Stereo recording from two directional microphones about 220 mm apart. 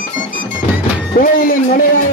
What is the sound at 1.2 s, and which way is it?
Speech, 40° left (ahead or behind).